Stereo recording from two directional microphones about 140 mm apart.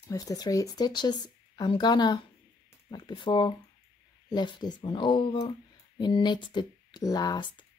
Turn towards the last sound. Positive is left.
turn(degrees=30)  # may be behind; listen again after turning